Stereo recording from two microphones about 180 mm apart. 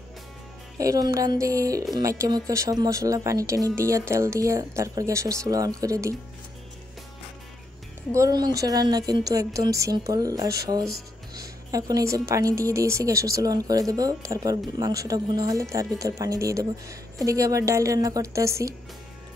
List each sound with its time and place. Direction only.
0.7 s a woman's voice: 20° right (ahead or behind)
8.1 s a woman's voice: 20° right (ahead or behind)